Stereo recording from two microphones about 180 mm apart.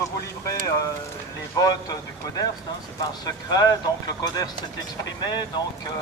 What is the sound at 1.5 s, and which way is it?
Speech, 20° left (ahead or behind).